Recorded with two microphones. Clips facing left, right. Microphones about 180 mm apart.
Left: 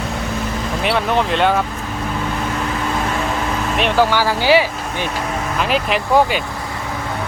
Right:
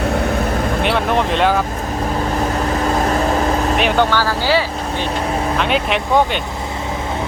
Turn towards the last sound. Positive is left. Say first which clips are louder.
# left 1 dB
turn(degrees=5)  # may be behind; listen again after turning